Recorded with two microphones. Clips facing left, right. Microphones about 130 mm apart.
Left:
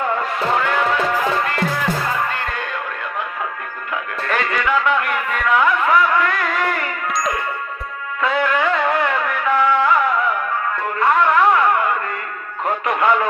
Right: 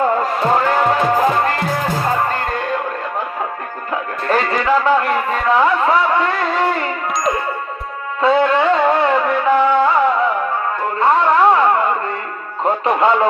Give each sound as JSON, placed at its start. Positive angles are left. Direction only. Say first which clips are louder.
{"t": 0.0, "sound": "music", "louder": "right 5 dB", "side_deg": -35}
{"t": 3.9, "sound": "music", "louder": "right 4 dB", "side_deg": -35}
{"t": 8.2, "sound": "music", "louder": "right 5 dB", "side_deg": -30}
{"t": 11.0, "sound": "a sound", "louder": "right 2 dB", "side_deg": -30}
{"t": 12.6, "sound": "music", "louder": "right 3 dB", "side_deg": -30}